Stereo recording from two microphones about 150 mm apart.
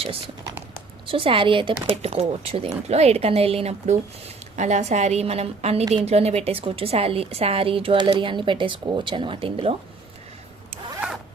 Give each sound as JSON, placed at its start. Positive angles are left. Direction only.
{"t": 1.0, "sound": "a woman's voice", "side_deg": -35}
{"t": 10.7, "sound": "zipper", "side_deg": -5}